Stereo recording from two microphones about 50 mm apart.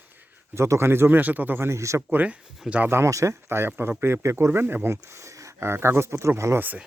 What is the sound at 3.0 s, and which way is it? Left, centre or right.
Speech, right.